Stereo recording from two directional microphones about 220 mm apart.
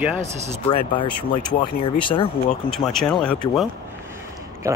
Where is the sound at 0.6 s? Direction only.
20° left (ahead or behind).